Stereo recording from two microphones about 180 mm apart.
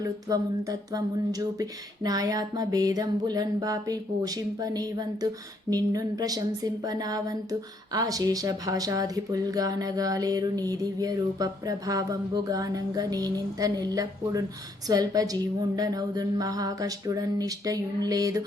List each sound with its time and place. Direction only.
0.0 s speech: 20° right (ahead or behind)